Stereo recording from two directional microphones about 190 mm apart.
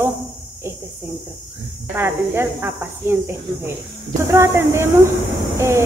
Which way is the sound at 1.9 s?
10° right (ahead or behind).